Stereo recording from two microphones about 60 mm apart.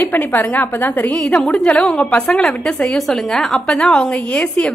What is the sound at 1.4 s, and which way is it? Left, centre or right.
A woman's voice, centre.